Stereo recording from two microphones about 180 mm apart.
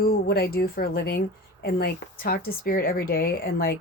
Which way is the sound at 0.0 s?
55° left (ahead or behind).